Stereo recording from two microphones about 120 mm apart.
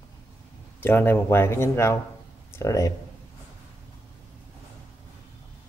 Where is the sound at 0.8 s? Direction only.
15° left (ahead or behind).